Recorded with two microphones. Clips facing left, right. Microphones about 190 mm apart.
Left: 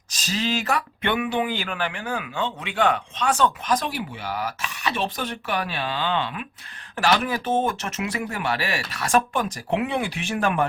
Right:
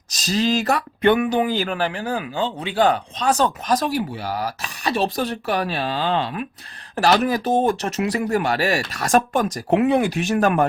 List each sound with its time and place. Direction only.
0.1 s speech: 40° right (ahead or behind)